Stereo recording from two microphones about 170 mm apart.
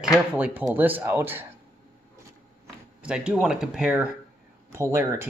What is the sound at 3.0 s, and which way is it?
Speech, 5° right (ahead or behind).